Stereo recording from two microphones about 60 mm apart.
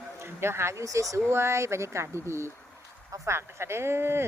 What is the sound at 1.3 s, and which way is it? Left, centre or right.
Speech, right.